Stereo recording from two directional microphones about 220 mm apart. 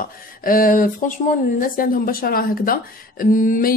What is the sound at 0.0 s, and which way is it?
Speech, 40° left (ahead or behind).